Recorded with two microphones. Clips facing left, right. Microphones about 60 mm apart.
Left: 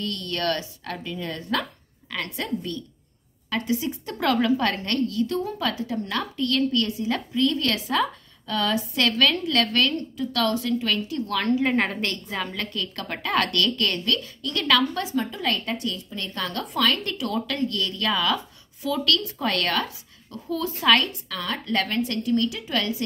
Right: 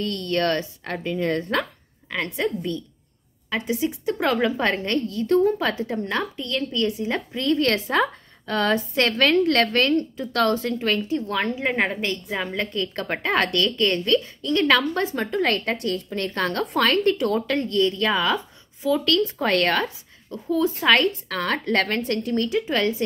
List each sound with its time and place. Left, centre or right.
0.0 s a woman's voice: right
2.0 s a woman's voice: right
5.2 s a woman's voice: right
11.6 s a woman's voice: centre; by 21.1 s right
21.3 s a woman's voice: right